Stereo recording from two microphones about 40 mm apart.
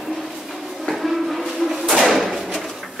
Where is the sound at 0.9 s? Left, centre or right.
Centre.